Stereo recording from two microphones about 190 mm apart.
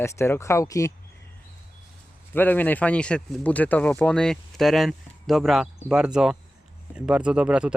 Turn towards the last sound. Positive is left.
turn(degrees=-5)  # may be behind; listen again after turning